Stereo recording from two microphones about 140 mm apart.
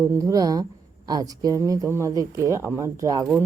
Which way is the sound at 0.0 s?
20° right (ahead or behind).